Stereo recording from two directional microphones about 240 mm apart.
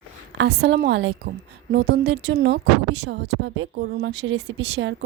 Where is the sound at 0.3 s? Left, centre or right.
Right.